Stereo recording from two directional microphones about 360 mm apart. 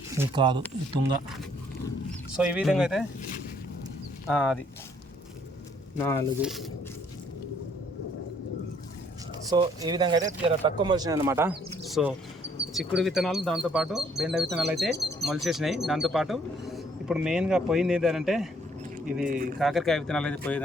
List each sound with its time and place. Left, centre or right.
0.2 s speech: centre
2.3 s speech: centre
6.1 s speech: centre
9.5 s speech: centre
19.3 s speech: right
19.5 s speech: centre